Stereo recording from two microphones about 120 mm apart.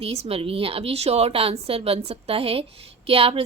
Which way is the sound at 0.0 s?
60° right (ahead or behind).